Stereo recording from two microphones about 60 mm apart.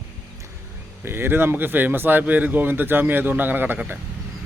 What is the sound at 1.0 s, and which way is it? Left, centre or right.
Speech, right.